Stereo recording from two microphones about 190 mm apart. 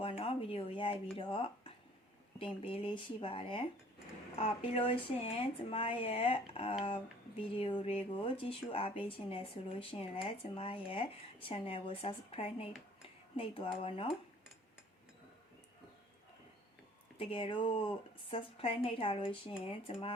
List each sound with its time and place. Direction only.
0.0 s speech: 30° left (ahead or behind)
17.2 s speech: 30° left (ahead or behind)